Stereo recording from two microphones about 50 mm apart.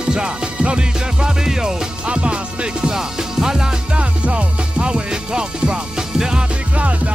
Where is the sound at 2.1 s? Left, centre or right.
Right.